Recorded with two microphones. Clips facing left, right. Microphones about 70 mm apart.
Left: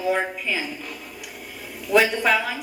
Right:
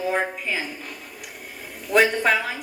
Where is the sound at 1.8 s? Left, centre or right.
Right.